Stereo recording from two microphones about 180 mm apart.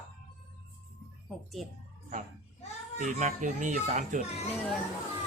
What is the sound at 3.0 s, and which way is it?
Speech, 45° right (ahead or behind).